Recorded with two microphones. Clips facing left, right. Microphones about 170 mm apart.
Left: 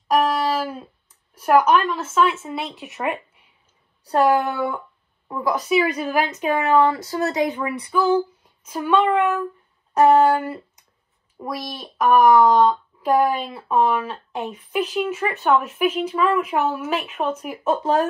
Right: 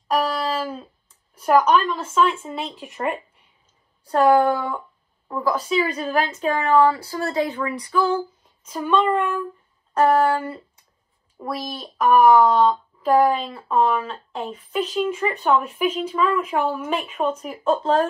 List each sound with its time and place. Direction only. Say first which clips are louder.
0.1 s a sound: left 3 dB; 10° left (ahead or behind)
1.3 s a woman's voice: left 1 dB; 10° left (ahead or behind)
4.1 s a woman's voice: right 2 dB; 10° left (ahead or behind)
7.5 s a woman's voice: even; 10° left (ahead or behind)